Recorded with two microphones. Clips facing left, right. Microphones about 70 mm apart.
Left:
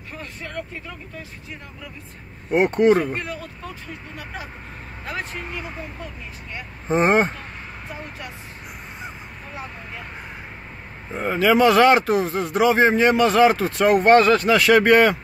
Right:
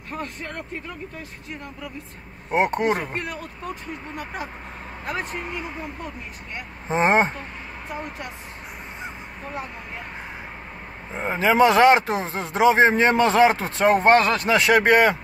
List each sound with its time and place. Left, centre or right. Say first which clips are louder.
0.1 s speech: right 2 dB; right
2.5 s speech: left 5 dB; right
3.2 s speech: even; right
6.9 s speech: left 1 dB; right
11.1 s speech: left 1 dB; right